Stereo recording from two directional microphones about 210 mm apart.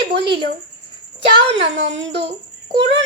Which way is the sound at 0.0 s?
50° right (ahead or behind).